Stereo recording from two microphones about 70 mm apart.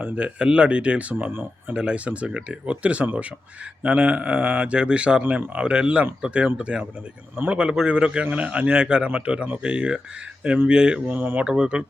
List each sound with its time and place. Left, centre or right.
0.0 s a man's voice: centre